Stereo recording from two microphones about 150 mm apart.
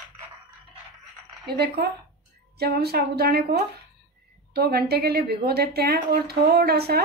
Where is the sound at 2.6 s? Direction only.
90° right.